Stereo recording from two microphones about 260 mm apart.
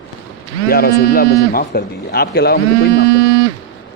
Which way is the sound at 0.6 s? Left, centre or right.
Left.